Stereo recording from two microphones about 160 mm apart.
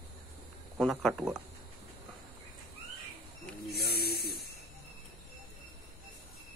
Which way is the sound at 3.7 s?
75° left (ahead or behind).